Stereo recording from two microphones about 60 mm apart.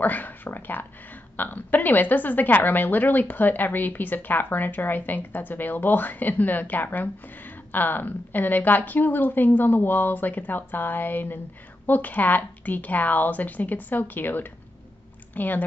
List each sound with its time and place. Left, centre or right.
0.0 s a woman's voice: left